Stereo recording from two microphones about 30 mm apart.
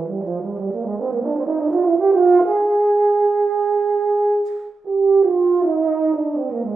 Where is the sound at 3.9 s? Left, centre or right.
Left.